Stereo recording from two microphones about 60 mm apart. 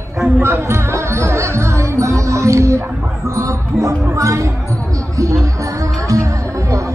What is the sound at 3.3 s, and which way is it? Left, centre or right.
Speech, right.